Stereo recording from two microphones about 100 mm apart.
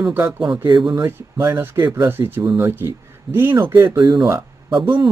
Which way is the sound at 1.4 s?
20° right (ahead or behind).